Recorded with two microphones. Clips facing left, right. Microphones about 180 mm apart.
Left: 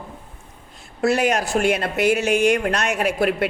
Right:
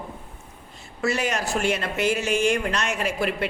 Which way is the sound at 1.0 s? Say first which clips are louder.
Left 6 dB; 60° left (ahead or behind).